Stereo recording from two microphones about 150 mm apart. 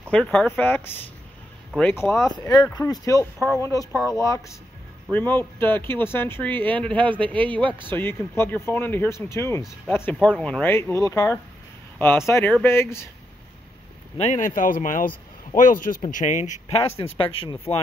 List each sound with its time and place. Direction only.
0.1 s speech: 5° left (ahead or behind)
2.7 s speech: 25° left (ahead or behind)
10.2 s speech: 5° left (ahead or behind)
10.6 s speech: 15° left (ahead or behind)
14.1 s speech: 50° left (ahead or behind)